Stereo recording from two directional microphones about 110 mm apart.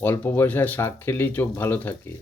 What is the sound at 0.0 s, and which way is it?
Speech, 20° left (ahead or behind).